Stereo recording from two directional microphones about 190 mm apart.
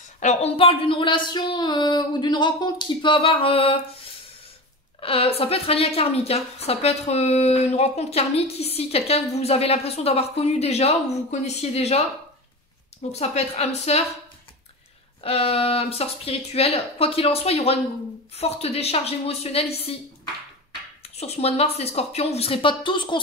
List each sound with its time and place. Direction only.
0.2 s speech: 35° left (ahead or behind)
5.0 s a woman's voice: 30° left (ahead or behind)
13.1 s a woman's voice: 35° left (ahead or behind)
15.2 s a woman's voice: 30° left (ahead or behind)
21.0 s a woman's voice: 35° left (ahead or behind)